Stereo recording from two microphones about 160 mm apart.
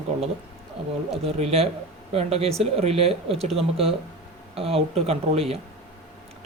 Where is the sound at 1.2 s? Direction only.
40° right (ahead or behind).